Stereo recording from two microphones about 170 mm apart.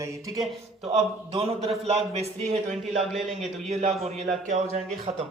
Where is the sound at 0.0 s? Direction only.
20° right (ahead or behind).